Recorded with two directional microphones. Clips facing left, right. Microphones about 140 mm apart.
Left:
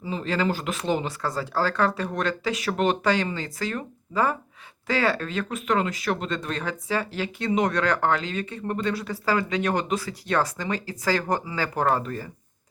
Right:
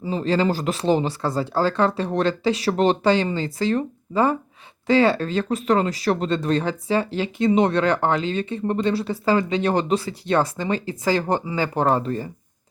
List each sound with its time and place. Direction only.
0.0 s speech: 35° right (ahead or behind)